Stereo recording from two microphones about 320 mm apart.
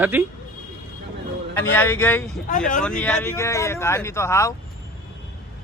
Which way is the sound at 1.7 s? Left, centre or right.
Centre.